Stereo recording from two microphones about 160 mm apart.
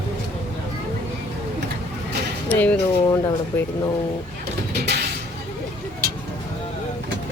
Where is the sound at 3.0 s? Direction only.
20° left (ahead or behind).